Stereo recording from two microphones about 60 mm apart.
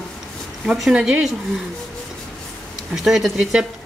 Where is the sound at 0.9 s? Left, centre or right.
Centre.